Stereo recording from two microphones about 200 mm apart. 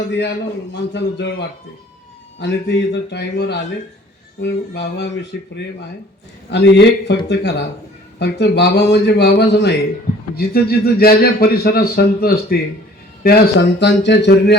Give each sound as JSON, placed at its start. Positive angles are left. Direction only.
{"t": 0.1, "sound": "a man's voice", "side_deg": 60}